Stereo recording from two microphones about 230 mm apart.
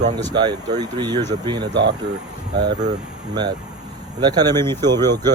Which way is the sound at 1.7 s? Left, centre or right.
Right.